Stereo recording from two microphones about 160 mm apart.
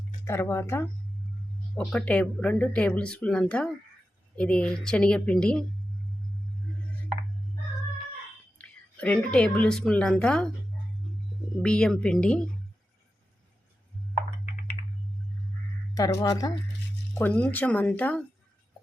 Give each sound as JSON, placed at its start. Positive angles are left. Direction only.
{"t": 0.3, "sound": "a woman's voice", "side_deg": 15}
{"t": 8.5, "sound": "a woman's voice", "side_deg": 10}
{"t": 11.6, "sound": "a woman's voice", "side_deg": 5}
{"t": 16.0, "sound": "speech", "side_deg": 20}
{"t": 17.2, "sound": "speech", "side_deg": 10}